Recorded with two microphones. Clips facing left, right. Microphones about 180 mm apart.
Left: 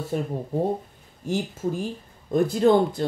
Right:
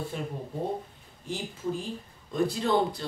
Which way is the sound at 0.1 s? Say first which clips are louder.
Left 8 dB; 45° left (ahead or behind).